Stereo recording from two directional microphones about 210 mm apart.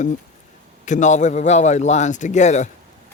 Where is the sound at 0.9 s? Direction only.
35° left (ahead or behind).